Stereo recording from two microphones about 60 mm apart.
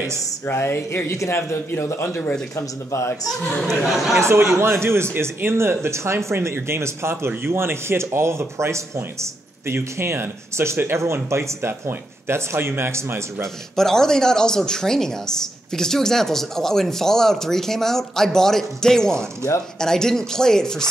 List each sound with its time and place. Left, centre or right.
0.5 s speech: left
1.0 s speech: left
1.8 s a man's voice: left
2.5 s speech: left
3.8 s speech: centre
4.2 s speech: right
13.7 s speech: centre